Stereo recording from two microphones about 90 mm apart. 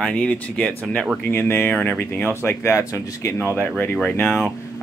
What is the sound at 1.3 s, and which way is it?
Speech, 25° left (ahead or behind).